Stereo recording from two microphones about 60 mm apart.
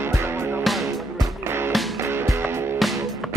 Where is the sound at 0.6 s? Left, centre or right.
Centre.